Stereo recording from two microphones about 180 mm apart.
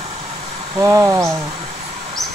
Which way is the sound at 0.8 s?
15° right (ahead or behind).